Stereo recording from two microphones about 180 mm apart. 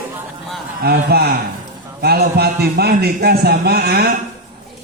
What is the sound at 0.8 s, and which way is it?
A man's voice, 60° right (ahead or behind).